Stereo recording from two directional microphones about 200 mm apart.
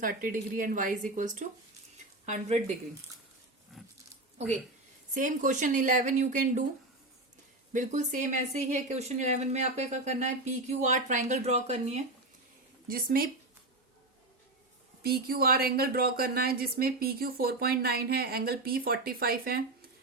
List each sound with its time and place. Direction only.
0.0 s speech: 45° right (ahead or behind)
3.8 s pig: centre (ahead or behind)
5.1 s speech: 40° right (ahead or behind)
7.7 s speech: 40° right (ahead or behind)
12.9 s speech: 45° right (ahead or behind)
15.0 s speech: 50° right (ahead or behind)